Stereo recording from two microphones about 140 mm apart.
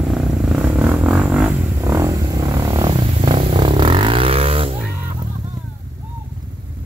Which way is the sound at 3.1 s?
40° right (ahead or behind).